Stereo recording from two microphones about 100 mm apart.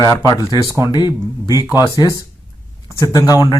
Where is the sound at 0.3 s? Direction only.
40° left (ahead or behind).